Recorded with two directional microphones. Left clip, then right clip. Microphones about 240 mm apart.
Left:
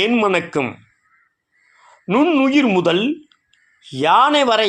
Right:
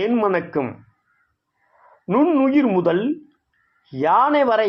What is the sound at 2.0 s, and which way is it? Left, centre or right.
Speech, left.